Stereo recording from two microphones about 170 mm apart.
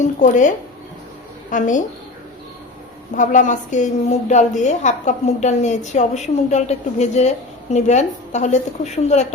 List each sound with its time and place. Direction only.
0.0 s a woman's voice: 45° left (ahead or behind)
3.2 s a woman's voice: 45° left (ahead or behind)